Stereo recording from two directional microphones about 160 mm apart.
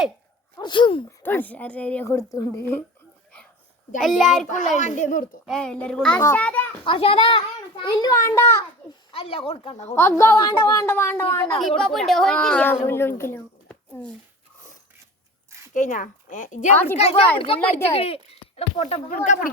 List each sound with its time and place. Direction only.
0.5 s speech: 30° left (ahead or behind)
1.2 s speech: 10° left (ahead or behind)
4.0 s a child's voice: centre (ahead or behind)
4.5 s speech: 50° left (ahead or behind)
5.5 s a child's voice: 5° left (ahead or behind)
6.8 s a child's voice: 35° left (ahead or behind); by 8.6 s 20° left (ahead or behind)
9.1 s a child's voice: 35° left (ahead or behind)
9.9 s speech: 15° left (ahead or behind)
11.8 s speech: centre (ahead or behind)
15.7 s speech: 55° left (ahead or behind)
17.0 s a child's voice: 40° left (ahead or behind)
19.1 s speech: 55° left (ahead or behind)